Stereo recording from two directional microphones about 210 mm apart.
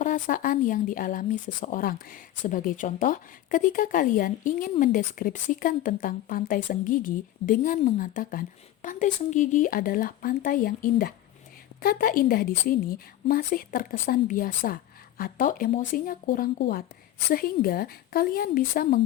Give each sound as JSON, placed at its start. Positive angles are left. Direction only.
{"t": 0.0, "sound": "a woman's voice", "side_deg": 40}